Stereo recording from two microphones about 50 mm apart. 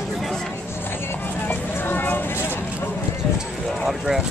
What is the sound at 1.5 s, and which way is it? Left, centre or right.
Vehicle, left.